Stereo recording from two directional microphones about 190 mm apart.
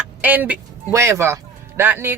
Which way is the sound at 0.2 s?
10° right (ahead or behind).